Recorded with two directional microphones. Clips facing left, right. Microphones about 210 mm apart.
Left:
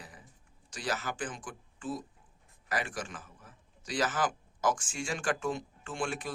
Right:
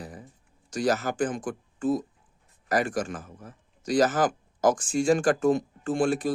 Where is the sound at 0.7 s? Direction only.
45° right (ahead or behind).